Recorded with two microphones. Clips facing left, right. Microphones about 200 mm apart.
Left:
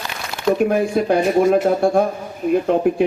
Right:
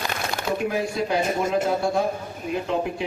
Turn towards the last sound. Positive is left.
turn(degrees=50)  # may be behind; listen again after turning